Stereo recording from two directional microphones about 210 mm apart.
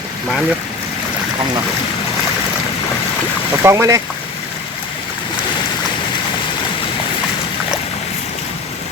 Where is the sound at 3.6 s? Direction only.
15° right (ahead or behind).